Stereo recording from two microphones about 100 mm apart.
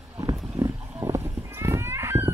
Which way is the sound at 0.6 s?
35° right (ahead or behind).